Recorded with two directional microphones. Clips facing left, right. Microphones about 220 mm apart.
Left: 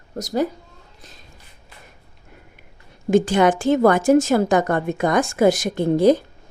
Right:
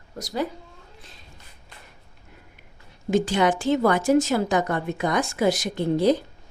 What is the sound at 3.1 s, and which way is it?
A woman's voice, 50° left (ahead or behind).